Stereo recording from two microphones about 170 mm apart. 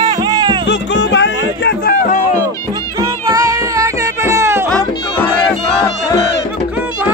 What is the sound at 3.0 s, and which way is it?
Music, 20° right (ahead or behind).